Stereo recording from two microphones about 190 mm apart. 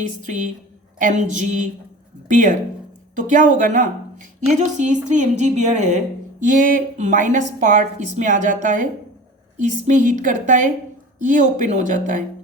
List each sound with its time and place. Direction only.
0.0 s a woman's voice: 40° right (ahead or behind)